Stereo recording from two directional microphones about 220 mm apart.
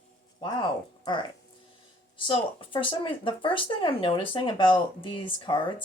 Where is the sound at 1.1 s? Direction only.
20° left (ahead or behind).